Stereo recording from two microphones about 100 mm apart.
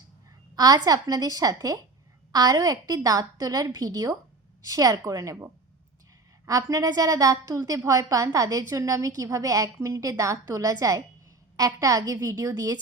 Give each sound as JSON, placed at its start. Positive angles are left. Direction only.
{"t": 0.5, "sound": "a woman's voice", "side_deg": -40}